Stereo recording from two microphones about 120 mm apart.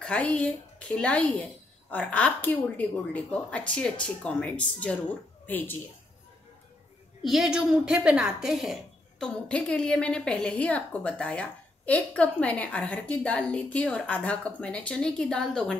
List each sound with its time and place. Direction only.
0.0 s a woman's voice: 10° left (ahead or behind)
7.2 s a woman's voice: 5° right (ahead or behind)
9.2 s a woman's voice: 10° left (ahead or behind)